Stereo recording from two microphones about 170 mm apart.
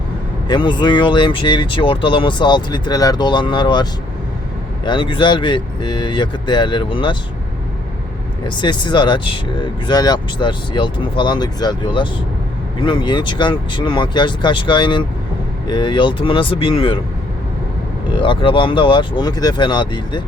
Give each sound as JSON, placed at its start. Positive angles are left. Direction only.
{"t": 0.4, "sound": "speech", "side_deg": 25}
{"t": 4.9, "sound": "speech", "side_deg": 30}
{"t": 8.4, "sound": "speech", "side_deg": 25}
{"t": 18.1, "sound": "speech", "side_deg": 30}